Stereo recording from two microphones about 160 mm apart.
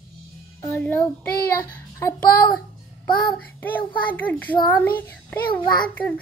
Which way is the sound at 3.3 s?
10° left (ahead or behind).